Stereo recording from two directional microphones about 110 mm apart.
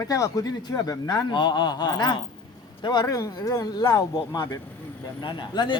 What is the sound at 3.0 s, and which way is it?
A man's voice, 30° left (ahead or behind).